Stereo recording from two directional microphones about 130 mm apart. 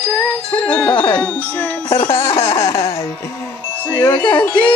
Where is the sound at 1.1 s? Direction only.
10° left (ahead or behind).